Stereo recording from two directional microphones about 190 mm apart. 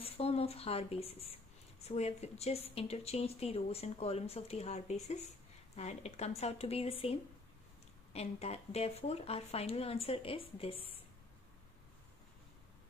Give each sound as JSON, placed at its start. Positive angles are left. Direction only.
{"t": 0.0, "sound": "speech", "side_deg": 30}